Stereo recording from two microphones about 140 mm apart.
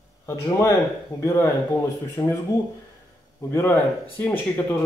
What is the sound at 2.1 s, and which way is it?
Speech, 20° left (ahead or behind).